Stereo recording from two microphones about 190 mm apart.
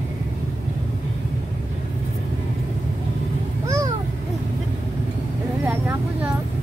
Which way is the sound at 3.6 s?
15° right (ahead or behind).